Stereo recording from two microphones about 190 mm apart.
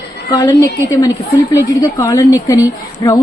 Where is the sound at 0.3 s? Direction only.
20° left (ahead or behind).